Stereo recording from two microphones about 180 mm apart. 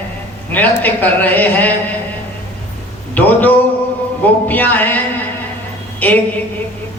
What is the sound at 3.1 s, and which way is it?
A man's voice, 10° left (ahead or behind).